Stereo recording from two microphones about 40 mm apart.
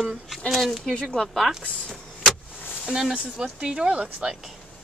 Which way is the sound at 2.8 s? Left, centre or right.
Centre.